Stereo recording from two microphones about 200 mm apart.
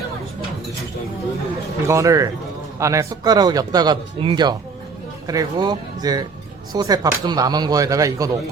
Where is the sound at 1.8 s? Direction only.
15° right (ahead or behind).